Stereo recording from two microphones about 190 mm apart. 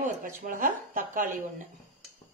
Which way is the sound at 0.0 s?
45° right (ahead or behind).